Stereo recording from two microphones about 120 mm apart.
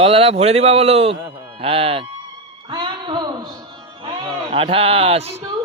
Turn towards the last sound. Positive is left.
turn(degrees=-60)  # may be behind; listen again after turning